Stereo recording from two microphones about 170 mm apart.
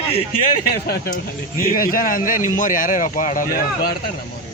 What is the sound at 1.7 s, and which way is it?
Speech, 55° left (ahead or behind).